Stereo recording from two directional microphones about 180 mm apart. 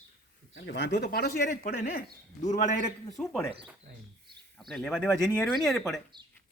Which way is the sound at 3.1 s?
Centre (ahead or behind).